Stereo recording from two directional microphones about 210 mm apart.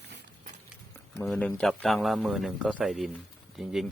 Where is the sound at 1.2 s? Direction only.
5° left (ahead or behind).